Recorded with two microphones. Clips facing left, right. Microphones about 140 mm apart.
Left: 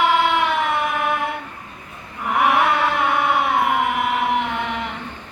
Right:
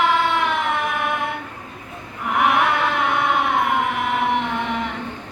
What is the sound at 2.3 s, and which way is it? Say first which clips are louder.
Chant: left 1 dB; centre (ahead or behind).